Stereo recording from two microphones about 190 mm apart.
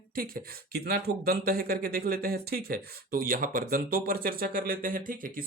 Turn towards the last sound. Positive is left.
turn(degrees=-45)  # may be behind; listen again after turning